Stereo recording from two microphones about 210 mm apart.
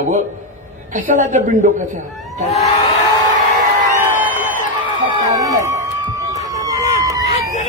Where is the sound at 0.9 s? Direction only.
35° right (ahead or behind).